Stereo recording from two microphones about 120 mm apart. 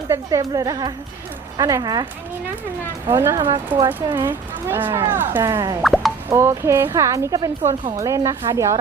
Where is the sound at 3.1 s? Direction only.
20° right (ahead or behind).